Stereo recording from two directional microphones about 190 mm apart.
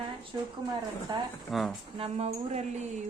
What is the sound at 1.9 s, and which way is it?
Speech, 30° right (ahead or behind).